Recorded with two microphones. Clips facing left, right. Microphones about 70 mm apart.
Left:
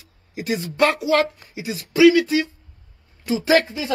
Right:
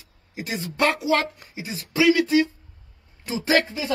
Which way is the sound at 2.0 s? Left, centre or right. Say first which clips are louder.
Left 4 dB; centre.